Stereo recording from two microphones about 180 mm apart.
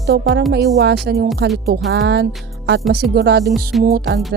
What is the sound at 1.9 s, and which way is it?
Speech, 70° right (ahead or behind).